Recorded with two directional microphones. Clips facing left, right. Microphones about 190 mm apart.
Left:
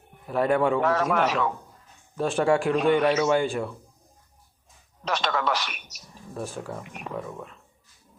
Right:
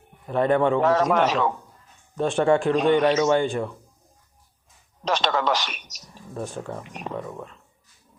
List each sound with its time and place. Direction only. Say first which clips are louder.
0.3 s speech: right 2 dB; 5° left (ahead or behind)
0.8 s a man's voice: right 3 dB; 25° right (ahead or behind)
2.1 s speech: right 2 dB; centre (ahead or behind)
5.0 s a man's voice: right 3 dB; 25° right (ahead or behind)
6.3 s speech: right 2 dB; 5° left (ahead or behind)
6.8 s a man's voice: right 3 dB; 25° right (ahead or behind)